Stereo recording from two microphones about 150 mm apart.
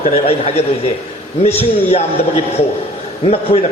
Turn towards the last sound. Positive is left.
turn(degrees=40)  # may be behind; listen again after turning